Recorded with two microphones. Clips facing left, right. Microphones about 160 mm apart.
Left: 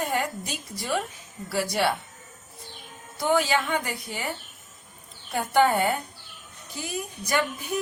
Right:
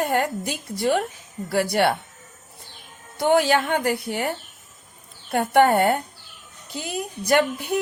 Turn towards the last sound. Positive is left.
turn(degrees=-60)  # may be behind; listen again after turning